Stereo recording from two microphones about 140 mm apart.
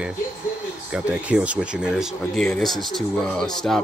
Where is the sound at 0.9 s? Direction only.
10° right (ahead or behind).